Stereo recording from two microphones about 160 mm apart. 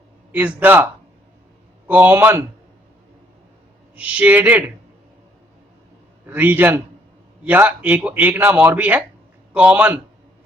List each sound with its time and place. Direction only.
0.3 s speech: 10° right (ahead or behind)
1.9 s speech: 10° right (ahead or behind)
3.9 s speech: 10° right (ahead or behind)
6.2 s speech: 10° right (ahead or behind)